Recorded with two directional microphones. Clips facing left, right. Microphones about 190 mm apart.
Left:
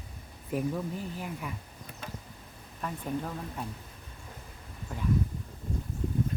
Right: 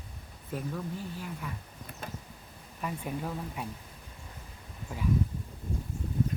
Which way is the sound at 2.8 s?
5° right (ahead or behind).